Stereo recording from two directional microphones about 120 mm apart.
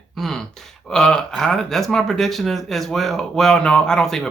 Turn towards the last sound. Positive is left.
turn(degrees=5)  # may be behind; listen again after turning